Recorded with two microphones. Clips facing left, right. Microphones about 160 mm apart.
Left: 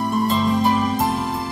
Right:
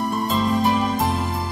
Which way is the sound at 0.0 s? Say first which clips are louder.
Left 2 dB; centre (ahead or behind).